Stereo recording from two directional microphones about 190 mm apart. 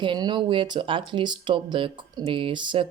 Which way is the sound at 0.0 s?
25° right (ahead or behind).